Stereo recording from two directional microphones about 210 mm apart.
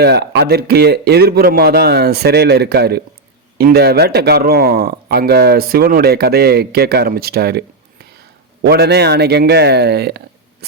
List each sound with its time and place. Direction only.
0.0 s speech: 50° right (ahead or behind)
8.6 s speech: 50° right (ahead or behind)